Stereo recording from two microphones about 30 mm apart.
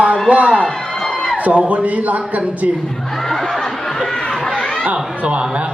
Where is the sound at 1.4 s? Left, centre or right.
Right.